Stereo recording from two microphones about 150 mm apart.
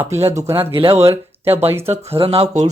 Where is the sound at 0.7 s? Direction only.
35° right (ahead or behind).